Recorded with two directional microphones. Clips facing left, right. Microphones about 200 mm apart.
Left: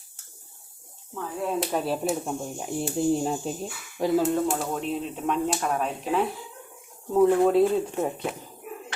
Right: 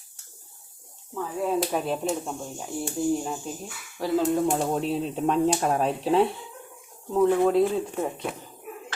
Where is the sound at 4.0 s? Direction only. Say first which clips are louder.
Left 3 dB; 20° left (ahead or behind).